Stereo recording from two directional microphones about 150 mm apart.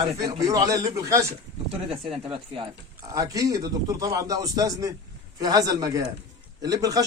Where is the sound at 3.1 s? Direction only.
20° right (ahead or behind).